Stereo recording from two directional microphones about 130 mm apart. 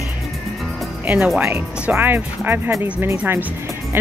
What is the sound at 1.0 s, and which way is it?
Speech, 15° right (ahead or behind).